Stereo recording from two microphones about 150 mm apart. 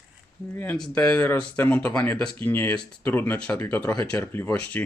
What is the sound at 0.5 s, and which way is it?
Speech, 15° left (ahead or behind).